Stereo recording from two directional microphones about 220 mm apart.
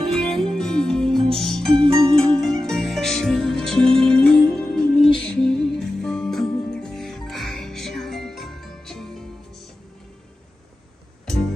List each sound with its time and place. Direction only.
0.0 s music: centre (ahead or behind)
2.0 s music: 25° right (ahead or behind)
2.4 s music: centre (ahead or behind)